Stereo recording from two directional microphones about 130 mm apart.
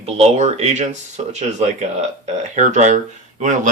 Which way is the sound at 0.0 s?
55° right (ahead or behind).